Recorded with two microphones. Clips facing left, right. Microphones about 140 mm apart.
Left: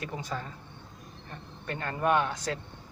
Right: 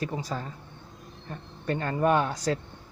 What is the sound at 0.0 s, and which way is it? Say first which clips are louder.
Speech: right 4 dB; 35° right (ahead or behind).